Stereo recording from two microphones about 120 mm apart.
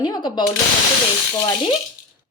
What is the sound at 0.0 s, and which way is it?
Speech, 40° left (ahead or behind).